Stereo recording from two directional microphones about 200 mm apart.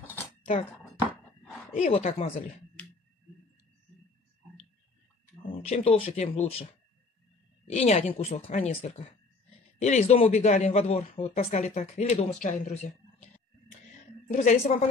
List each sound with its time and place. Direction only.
1.8 s speech: 35° left (ahead or behind)
5.5 s speech: 30° left (ahead or behind)